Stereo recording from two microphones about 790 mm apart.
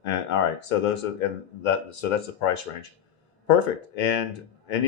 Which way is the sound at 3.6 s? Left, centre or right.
Left.